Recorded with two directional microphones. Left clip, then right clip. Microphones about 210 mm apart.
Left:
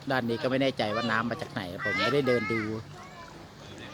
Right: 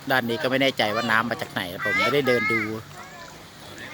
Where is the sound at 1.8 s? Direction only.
25° left (ahead or behind).